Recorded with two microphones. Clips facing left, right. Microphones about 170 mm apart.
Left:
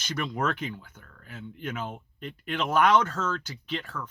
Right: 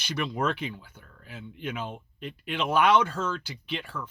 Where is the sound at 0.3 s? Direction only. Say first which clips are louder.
Even; 5° right (ahead or behind).